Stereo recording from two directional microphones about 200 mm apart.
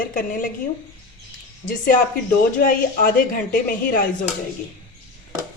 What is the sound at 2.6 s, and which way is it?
A woman's voice, 45° left (ahead or behind).